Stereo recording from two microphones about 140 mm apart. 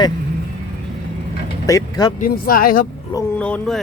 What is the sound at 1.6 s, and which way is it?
Speech, 25° left (ahead or behind).